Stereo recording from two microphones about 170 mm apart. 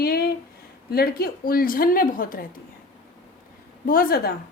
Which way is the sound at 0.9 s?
65° left (ahead or behind).